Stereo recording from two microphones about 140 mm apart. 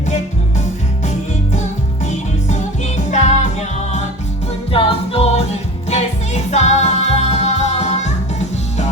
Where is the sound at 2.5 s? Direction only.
60° left (ahead or behind).